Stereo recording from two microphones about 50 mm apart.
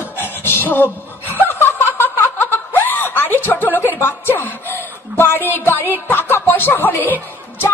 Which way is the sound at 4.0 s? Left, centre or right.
Left.